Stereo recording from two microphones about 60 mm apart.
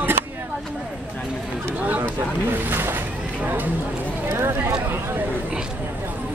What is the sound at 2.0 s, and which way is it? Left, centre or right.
Speech, right.